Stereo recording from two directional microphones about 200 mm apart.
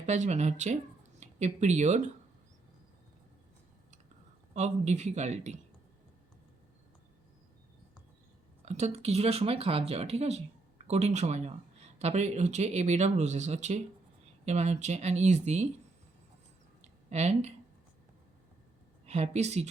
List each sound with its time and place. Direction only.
0.0 s speech: 35° right (ahead or behind)
4.5 s speech: 35° right (ahead or behind)
8.6 s speech: 35° right (ahead or behind)
16.8 s a sound: 35° right (ahead or behind)
19.0 s a woman's voice: 30° right (ahead or behind)